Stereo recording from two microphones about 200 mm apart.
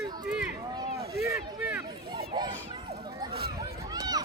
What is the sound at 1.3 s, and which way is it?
Speech, 15° right (ahead or behind).